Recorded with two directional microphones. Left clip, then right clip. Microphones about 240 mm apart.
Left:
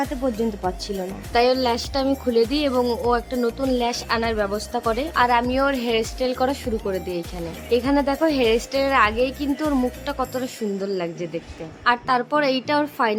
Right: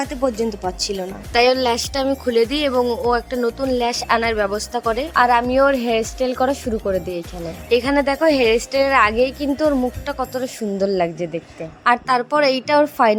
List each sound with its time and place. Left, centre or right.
0.0 s a woman's voice: right
2.8 s a woman's voice: centre
3.1 s a woman's voice: right
7.7 s a woman's voice: right